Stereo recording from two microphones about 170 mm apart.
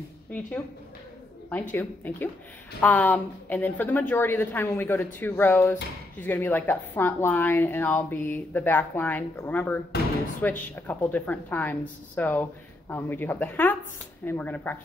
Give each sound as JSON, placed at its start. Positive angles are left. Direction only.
{"t": 1.5, "sound": "a woman's voice", "side_deg": 10}